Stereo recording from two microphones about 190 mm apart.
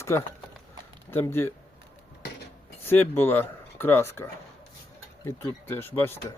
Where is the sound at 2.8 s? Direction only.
10° left (ahead or behind).